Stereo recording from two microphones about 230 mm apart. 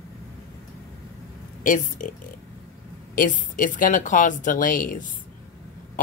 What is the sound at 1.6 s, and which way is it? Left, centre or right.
Speech, left.